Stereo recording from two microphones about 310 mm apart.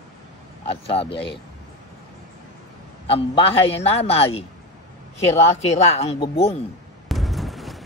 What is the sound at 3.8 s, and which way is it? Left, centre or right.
Speech, centre.